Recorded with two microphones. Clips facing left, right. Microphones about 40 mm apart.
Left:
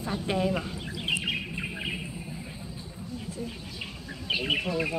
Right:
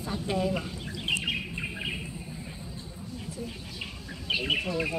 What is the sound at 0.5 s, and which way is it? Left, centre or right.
Bird, centre.